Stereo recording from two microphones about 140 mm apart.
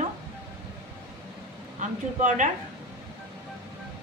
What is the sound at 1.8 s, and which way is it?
Speech, 60° right (ahead or behind).